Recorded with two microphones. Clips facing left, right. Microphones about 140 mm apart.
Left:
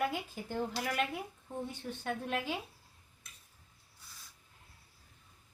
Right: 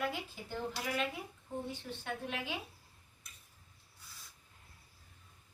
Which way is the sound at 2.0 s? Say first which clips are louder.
Left 6 dB; 45° left (ahead or behind).